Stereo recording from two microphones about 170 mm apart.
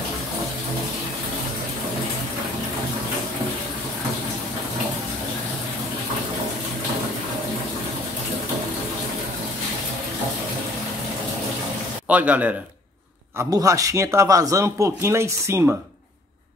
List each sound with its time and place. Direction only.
12.1 s speech: 10° right (ahead or behind)
13.5 s speech: 20° right (ahead or behind)